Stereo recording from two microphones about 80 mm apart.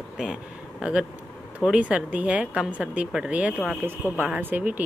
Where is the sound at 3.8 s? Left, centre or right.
Right.